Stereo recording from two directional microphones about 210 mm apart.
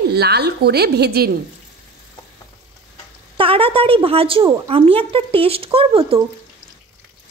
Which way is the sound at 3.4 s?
25° right (ahead or behind).